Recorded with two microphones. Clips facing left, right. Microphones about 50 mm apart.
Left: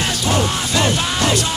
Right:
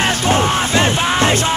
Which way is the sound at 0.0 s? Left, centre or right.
Right.